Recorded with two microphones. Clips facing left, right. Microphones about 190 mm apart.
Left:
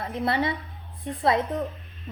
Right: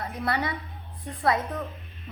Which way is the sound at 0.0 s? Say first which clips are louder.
Left 3 dB; 25° left (ahead or behind).